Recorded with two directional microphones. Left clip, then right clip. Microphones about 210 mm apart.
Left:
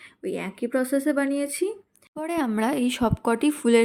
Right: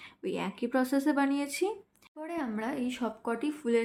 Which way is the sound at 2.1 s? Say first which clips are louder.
Left 9 dB; 50° left (ahead or behind).